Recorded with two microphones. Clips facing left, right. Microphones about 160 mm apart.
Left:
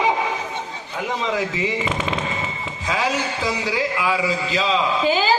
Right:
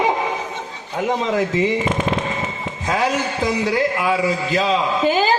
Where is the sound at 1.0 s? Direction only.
50° right (ahead or behind).